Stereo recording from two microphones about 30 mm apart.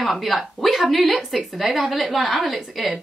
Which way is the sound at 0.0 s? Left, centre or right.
Centre.